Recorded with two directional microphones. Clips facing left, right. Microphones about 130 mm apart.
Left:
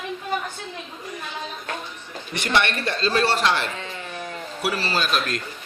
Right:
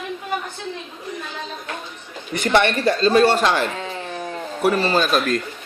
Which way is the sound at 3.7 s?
35° right (ahead or behind).